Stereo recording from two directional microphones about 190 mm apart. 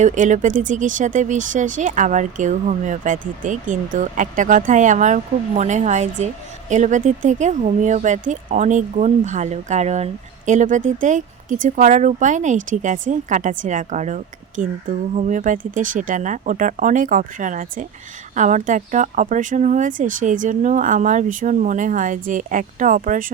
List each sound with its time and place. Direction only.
0.0 s speech: 40° right (ahead or behind)